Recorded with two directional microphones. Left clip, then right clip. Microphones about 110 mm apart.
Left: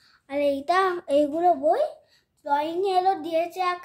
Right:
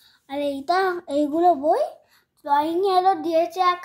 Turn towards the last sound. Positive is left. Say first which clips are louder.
# right 5 dB
turn(degrees=-15)  # may be behind; listen again after turning